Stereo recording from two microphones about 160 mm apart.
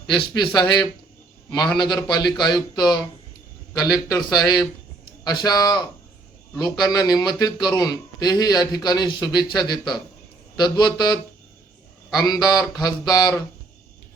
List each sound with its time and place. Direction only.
0.1 s a man's voice: 30° left (ahead or behind)